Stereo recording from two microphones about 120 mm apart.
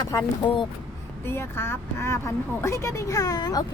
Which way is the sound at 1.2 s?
20° left (ahead or behind).